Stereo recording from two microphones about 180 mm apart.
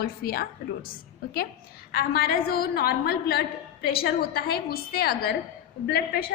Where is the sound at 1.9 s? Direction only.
55° left (ahead or behind).